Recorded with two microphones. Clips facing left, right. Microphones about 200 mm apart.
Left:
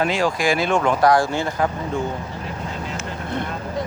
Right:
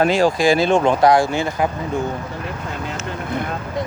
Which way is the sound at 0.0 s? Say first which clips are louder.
Right 5 dB; 35° right (ahead or behind).